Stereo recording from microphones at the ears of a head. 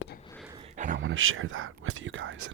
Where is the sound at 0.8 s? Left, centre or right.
Right.